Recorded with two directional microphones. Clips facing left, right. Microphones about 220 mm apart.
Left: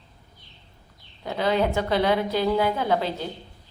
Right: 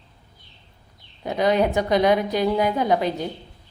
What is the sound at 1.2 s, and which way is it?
A woman's voice, 15° right (ahead or behind).